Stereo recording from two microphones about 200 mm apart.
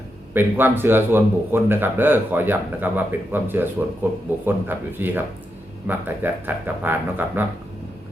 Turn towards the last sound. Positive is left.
turn(degrees=-10)  # may be behind; listen again after turning